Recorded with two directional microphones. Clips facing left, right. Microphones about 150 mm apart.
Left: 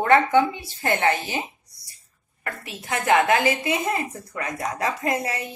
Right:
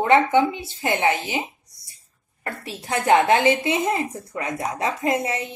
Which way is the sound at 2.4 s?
30° right (ahead or behind).